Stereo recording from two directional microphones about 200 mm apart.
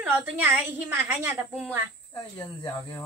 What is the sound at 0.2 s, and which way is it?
Speech, 10° right (ahead or behind).